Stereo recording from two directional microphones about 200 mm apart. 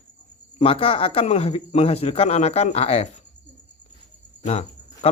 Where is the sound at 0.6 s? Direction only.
25° left (ahead or behind).